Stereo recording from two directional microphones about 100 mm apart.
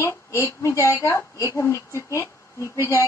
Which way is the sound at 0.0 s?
30° left (ahead or behind).